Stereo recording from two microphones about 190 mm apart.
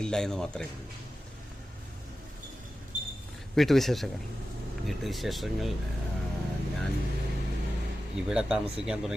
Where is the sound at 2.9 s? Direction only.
45° right (ahead or behind).